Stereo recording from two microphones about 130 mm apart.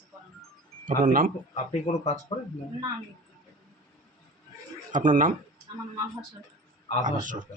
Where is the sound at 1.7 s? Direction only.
65° left (ahead or behind).